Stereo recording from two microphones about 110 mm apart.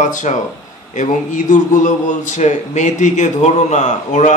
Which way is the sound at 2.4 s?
90° left.